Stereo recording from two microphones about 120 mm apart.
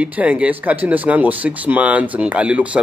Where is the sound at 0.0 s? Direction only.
10° right (ahead or behind).